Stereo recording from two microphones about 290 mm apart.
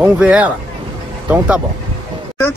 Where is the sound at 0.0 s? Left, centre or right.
Centre.